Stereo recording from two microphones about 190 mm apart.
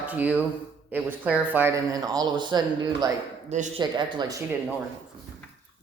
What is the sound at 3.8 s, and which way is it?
Speech, 25° right (ahead or behind).